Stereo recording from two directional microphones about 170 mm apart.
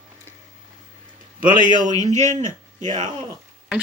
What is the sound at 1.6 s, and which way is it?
Speech, 45° right (ahead or behind).